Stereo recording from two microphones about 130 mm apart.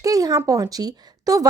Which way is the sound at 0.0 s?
25° right (ahead or behind).